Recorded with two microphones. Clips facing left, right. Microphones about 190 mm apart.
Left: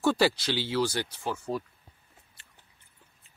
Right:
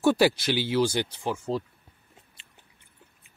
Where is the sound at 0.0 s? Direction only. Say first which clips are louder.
Right 3 dB; 15° right (ahead or behind).